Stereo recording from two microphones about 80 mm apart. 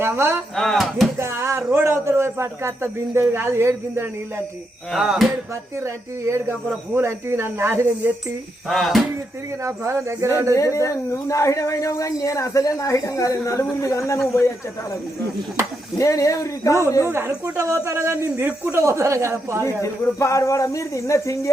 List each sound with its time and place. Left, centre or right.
0.0 s speech: right
0.5 s speech: centre
1.2 s a man's voice: right
4.9 s speech: centre
5.8 s speech: right
8.6 s speech: centre
9.6 s speech: right
10.5 s speech: left
16.0 s speech: left
17.1 s speech: right
19.6 s speech: left